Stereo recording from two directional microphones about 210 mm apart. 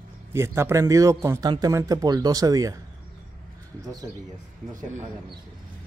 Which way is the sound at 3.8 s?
15° right (ahead or behind).